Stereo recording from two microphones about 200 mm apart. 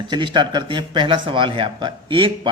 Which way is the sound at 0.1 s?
25° right (ahead or behind).